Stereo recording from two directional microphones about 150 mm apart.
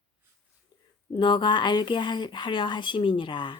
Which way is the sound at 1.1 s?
35° left (ahead or behind).